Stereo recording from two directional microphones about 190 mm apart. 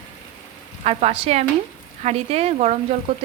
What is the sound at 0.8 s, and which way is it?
A woman's voice, 35° right (ahead or behind).